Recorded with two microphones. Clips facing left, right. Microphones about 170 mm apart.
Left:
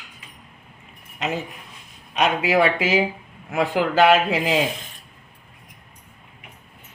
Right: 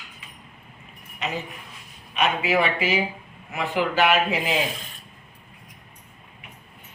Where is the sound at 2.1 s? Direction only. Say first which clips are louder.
Left 3 dB; 90° left.